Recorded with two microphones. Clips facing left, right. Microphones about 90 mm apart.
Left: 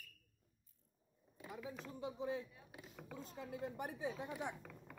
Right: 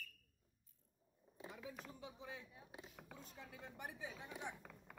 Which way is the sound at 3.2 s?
35° left (ahead or behind).